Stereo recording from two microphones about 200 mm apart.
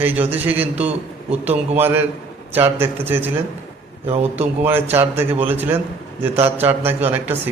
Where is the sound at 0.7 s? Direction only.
30° right (ahead or behind).